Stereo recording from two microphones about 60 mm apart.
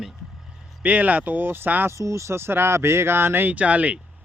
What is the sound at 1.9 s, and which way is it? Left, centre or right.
Speech, right.